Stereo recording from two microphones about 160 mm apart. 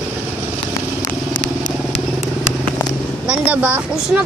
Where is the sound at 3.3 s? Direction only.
10° right (ahead or behind).